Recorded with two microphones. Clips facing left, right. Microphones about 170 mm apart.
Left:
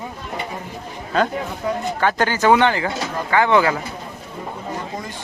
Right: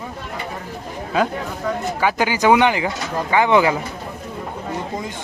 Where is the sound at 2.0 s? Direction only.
10° right (ahead or behind).